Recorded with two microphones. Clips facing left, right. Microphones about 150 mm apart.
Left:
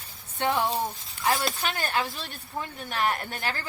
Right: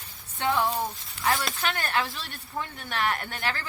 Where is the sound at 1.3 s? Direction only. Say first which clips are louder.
Left 1 dB; 40° left (ahead or behind).